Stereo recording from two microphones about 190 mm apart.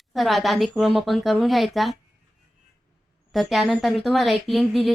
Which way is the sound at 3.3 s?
Centre (ahead or behind).